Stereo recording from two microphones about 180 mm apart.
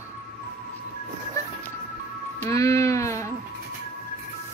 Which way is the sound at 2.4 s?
15° left (ahead or behind).